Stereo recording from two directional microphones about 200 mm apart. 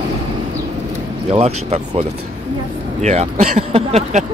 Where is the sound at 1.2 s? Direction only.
30° right (ahead or behind).